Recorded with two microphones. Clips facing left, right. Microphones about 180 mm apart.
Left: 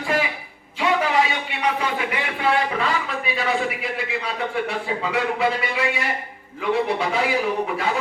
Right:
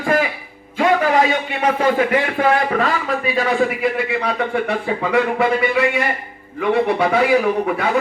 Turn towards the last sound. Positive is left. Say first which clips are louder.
# right 5 dB
turn(degrees=-60)  # may be behind; listen again after turning